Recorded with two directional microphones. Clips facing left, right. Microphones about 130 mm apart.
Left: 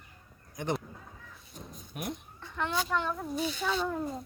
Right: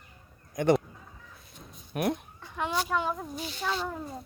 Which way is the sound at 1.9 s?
65° right (ahead or behind).